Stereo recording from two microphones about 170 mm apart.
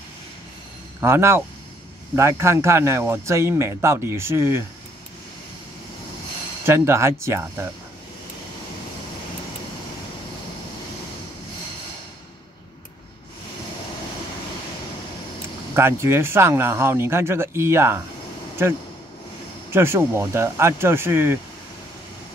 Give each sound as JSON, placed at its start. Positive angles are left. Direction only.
{"t": 1.0, "sound": "speech", "side_deg": -15}
{"t": 6.6, "sound": "speech", "side_deg": -15}
{"t": 15.7, "sound": "speech", "side_deg": -15}
{"t": 19.7, "sound": "speech", "side_deg": -15}